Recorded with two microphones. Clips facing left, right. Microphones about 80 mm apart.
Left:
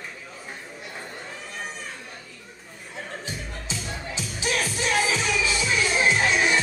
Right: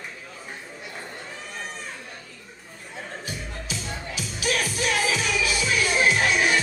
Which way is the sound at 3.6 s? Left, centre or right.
Left.